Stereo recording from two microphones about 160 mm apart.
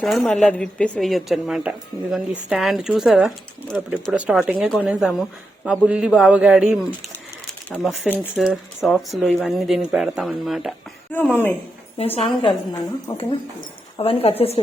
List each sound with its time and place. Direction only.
0.0 s speech: centre (ahead or behind)
11.1 s speech: 10° left (ahead or behind)
11.9 s a woman's voice: 35° left (ahead or behind)
14.0 s a woman's voice: 35° left (ahead or behind)